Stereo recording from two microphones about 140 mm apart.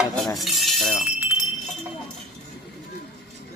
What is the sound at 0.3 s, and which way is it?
Speech, centre (ahead or behind).